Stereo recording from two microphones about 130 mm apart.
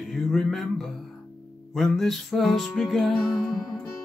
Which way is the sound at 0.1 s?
Centre (ahead or behind).